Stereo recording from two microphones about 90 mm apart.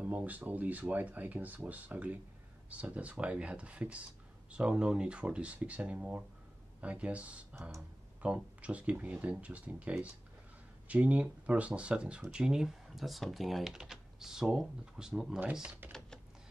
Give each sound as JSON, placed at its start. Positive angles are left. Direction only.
{"t": 0.0, "sound": "speech", "side_deg": -15}